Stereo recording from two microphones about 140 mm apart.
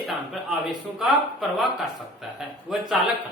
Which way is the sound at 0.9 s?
Centre (ahead or behind).